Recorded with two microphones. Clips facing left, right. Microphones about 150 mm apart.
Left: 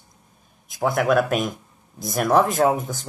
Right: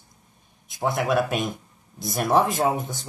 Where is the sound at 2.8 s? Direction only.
Centre (ahead or behind).